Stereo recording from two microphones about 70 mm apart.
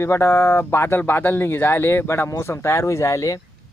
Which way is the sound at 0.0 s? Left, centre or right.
Left.